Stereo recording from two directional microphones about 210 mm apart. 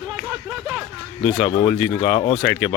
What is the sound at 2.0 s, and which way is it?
Speech, 30° left (ahead or behind).